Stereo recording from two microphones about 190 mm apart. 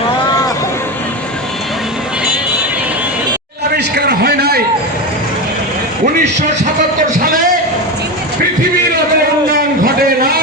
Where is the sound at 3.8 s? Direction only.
60° right (ahead or behind).